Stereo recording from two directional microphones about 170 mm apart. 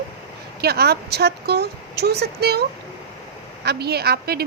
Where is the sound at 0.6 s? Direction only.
70° right (ahead or behind).